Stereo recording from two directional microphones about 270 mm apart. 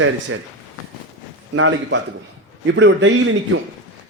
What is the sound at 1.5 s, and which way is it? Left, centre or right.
A man's voice, right.